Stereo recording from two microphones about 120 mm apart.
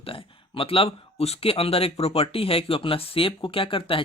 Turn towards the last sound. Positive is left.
turn(degrees=50)  # may be behind; listen again after turning